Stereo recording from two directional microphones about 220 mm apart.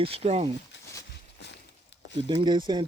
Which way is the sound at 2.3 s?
20° right (ahead or behind).